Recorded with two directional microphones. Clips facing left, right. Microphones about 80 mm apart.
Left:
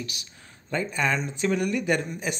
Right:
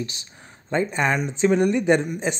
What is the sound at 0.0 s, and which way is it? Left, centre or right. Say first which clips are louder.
Speech: right 5 dB; right.